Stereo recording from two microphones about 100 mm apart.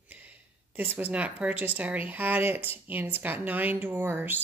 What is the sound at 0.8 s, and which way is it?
Speech, 20° right (ahead or behind).